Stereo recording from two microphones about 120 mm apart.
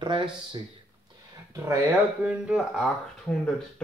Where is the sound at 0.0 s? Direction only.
40° right (ahead or behind).